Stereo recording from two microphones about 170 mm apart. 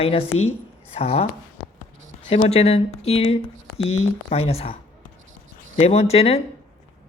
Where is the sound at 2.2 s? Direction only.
40° left (ahead or behind).